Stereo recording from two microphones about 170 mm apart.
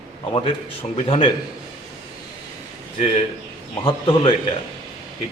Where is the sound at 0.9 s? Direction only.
35° left (ahead or behind).